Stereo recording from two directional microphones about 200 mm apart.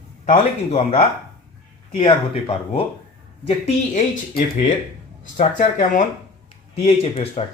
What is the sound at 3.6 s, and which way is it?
Speech, 40° left (ahead or behind).